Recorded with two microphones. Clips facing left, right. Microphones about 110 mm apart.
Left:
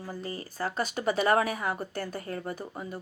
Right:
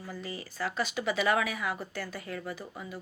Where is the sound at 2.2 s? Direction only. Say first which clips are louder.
Left 3 dB; 35° left (ahead or behind).